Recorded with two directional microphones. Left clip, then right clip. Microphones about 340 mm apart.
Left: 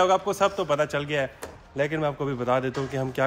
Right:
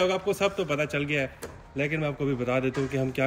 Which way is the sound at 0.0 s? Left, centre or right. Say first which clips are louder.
Left 4 dB; left.